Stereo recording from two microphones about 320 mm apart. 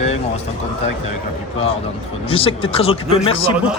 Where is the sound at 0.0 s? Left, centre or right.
Centre.